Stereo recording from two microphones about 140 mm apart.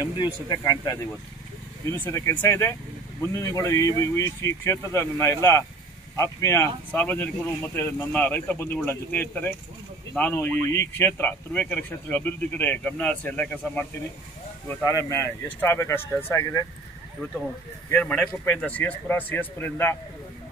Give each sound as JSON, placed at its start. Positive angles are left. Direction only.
{"t": 0.2, "sound": "speech", "side_deg": 30}
{"t": 1.9, "sound": "speech", "side_deg": 15}
{"t": 17.8, "sound": "speech", "side_deg": 10}